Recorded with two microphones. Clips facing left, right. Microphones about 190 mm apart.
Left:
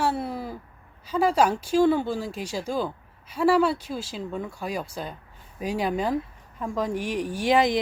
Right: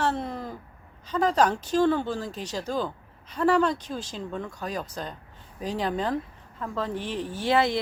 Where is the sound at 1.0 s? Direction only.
10° left (ahead or behind).